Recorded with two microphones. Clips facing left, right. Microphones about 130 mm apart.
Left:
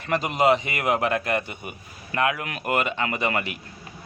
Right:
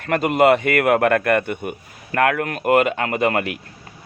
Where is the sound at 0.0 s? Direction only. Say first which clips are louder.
Right 5 dB; 55° right (ahead or behind).